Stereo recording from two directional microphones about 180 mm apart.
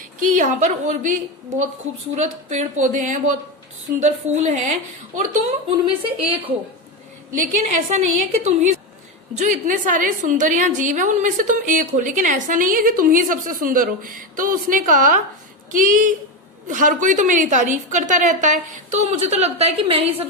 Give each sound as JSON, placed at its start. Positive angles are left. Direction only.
{"t": 0.0, "sound": "a woman's voice", "side_deg": -45}
{"t": 2.1, "sound": "a woman's voice", "side_deg": -40}
{"t": 7.4, "sound": "a woman's voice", "side_deg": -40}